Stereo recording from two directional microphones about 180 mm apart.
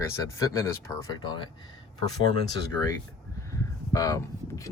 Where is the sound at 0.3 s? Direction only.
20° left (ahead or behind).